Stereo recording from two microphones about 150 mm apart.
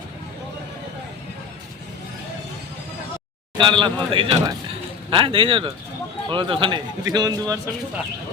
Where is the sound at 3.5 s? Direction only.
30° right (ahead or behind).